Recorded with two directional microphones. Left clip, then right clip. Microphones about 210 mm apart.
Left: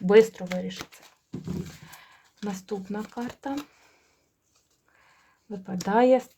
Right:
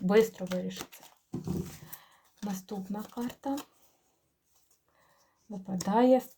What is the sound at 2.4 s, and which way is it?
Speech, 40° left (ahead or behind).